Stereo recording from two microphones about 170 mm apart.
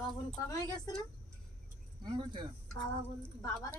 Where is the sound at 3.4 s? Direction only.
15° left (ahead or behind).